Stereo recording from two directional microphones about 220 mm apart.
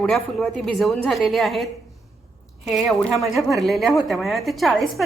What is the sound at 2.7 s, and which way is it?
A woman's voice, centre (ahead or behind).